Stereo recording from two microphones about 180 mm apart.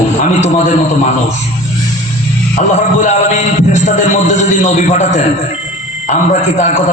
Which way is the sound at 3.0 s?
40° left (ahead or behind).